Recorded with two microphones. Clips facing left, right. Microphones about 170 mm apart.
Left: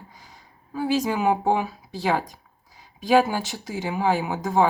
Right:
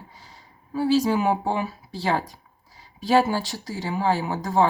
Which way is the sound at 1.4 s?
15° left (ahead or behind).